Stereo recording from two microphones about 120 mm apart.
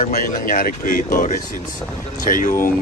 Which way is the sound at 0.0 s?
90° left.